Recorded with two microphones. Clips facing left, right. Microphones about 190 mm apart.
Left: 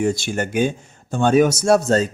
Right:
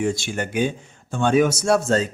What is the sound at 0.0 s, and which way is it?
Speech, 40° left (ahead or behind).